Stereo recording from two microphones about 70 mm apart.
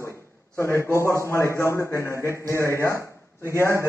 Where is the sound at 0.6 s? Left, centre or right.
Left.